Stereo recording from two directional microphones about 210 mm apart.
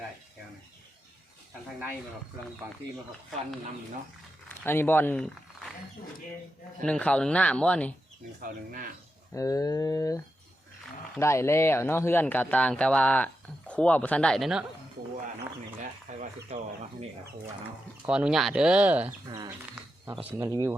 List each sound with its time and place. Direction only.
4.4 s a sound: 10° left (ahead or behind)
6.8 s speech: 5° left (ahead or behind)
8.4 s speech: 40° right (ahead or behind)
9.3 s speech: 15° left (ahead or behind)
11.2 s speech: 15° left (ahead or behind)
15.8 s a sound: 35° right (ahead or behind)
18.0 s speech: 5° right (ahead or behind)